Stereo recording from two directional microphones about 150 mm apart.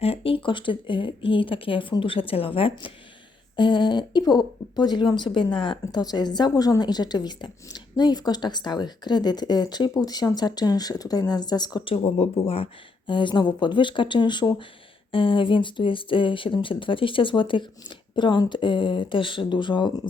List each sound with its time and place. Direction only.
0.0 s speech: 40° left (ahead or behind)
12.0 s speech: 40° left (ahead or behind)